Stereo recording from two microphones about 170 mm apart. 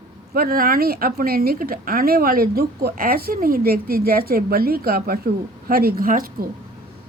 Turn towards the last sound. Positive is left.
turn(degrees=-55)  # may be behind; listen again after turning